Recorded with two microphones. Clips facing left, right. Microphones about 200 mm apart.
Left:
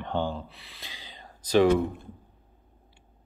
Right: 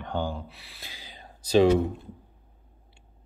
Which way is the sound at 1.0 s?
10° right (ahead or behind).